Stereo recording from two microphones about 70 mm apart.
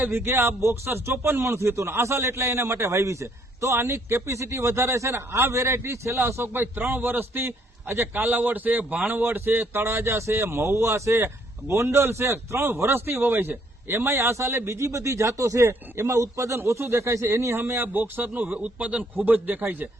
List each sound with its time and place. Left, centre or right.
0.0 s a man's voice: right